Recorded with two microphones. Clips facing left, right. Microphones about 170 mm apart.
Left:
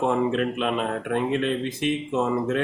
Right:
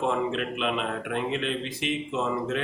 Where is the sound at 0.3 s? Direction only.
45° left (ahead or behind).